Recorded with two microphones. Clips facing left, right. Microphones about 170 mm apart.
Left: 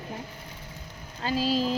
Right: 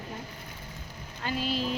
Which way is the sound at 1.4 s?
35° left (ahead or behind).